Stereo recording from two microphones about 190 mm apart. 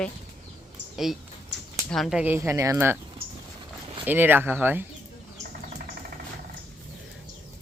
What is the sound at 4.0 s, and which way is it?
Speech, 10° right (ahead or behind).